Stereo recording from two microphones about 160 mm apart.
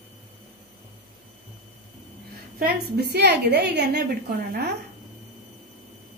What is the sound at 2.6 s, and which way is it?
A woman's voice, 90° right.